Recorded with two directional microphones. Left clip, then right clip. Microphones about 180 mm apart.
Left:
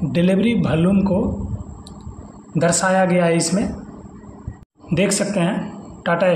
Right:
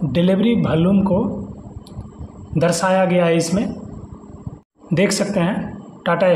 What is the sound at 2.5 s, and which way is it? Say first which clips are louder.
Speech: right 1 dB; 10° right (ahead or behind).